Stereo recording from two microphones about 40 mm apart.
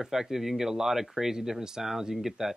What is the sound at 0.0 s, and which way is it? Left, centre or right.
Speech, centre.